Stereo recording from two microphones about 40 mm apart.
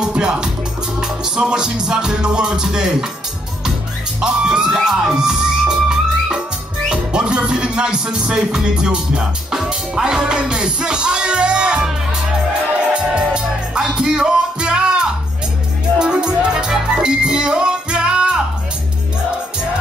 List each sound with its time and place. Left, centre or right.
0.0 s music: right
4.2 s music: centre
12.9 s music: right